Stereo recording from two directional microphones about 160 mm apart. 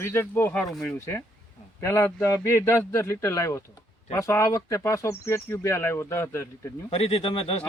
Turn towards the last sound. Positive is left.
turn(degrees=35)  # may be behind; listen again after turning